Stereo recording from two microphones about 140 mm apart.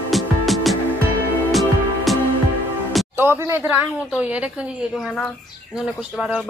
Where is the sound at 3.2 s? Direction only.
15° right (ahead or behind).